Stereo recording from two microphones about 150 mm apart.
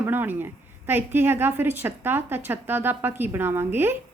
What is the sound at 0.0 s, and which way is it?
A woman's voice, 15° right (ahead or behind).